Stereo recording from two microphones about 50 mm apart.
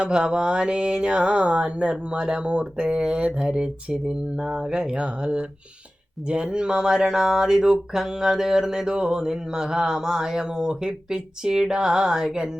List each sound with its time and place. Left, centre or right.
0.0 s speech: centre